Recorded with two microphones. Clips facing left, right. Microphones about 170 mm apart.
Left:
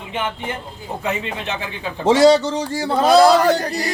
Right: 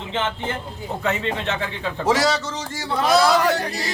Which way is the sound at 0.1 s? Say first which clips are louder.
Even; 15° left (ahead or behind).